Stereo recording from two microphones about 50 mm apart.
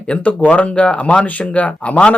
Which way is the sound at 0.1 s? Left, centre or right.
Left.